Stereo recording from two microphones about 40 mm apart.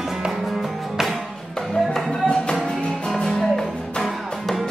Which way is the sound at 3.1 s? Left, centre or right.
Centre.